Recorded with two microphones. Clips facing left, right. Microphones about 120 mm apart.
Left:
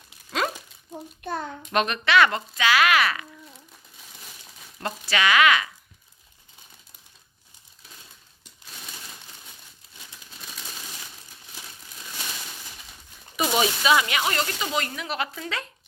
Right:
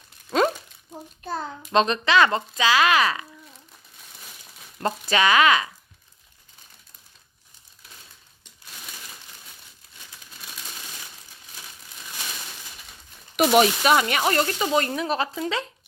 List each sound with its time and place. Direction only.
0.3 s crumpling: 30° right (ahead or behind)
1.2 s speech: 30° right (ahead or behind)
5.0 s speech: 35° right (ahead or behind)
13.3 s speech: 65° right (ahead or behind)
13.9 s speech: 45° right (ahead or behind); by 15.7 s 25° right (ahead or behind)